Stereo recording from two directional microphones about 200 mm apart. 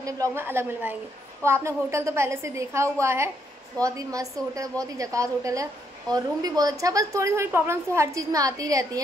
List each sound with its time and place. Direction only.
0.0 s a woman's voice: 15° right (ahead or behind)